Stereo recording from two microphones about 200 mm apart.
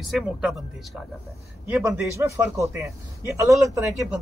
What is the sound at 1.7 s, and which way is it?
Speech, 10° right (ahead or behind).